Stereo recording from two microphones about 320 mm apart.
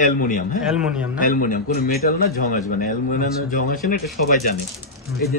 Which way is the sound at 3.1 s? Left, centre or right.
Left.